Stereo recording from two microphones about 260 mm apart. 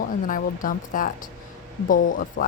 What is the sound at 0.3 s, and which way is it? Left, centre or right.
Speech, left.